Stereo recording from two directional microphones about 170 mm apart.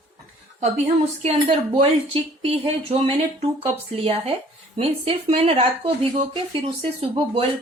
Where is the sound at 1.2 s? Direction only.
35° right (ahead or behind).